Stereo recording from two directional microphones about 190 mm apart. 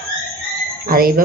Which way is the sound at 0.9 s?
50° right (ahead or behind).